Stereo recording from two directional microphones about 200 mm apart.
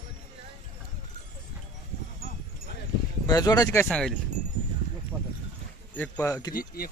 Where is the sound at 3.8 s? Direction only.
5° left (ahead or behind).